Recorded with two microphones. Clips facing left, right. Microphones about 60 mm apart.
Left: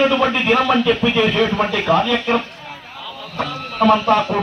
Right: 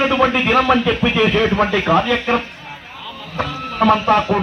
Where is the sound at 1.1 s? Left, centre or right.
Centre.